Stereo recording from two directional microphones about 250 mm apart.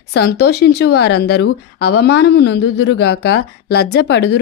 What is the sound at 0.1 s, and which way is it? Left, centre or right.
Speech, left.